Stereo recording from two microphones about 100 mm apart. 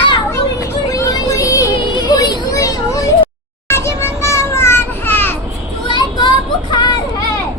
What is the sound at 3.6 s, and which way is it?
Music, 25° left (ahead or behind).